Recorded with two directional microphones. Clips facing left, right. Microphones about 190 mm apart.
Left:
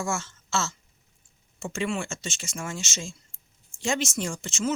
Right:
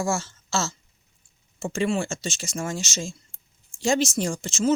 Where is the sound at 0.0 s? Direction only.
35° right (ahead or behind).